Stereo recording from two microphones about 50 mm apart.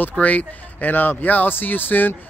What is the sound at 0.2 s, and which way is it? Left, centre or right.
Speech, left.